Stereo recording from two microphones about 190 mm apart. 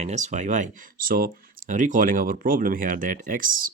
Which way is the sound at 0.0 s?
40° right (ahead or behind).